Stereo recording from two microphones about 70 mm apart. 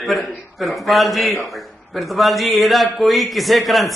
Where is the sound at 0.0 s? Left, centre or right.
Centre.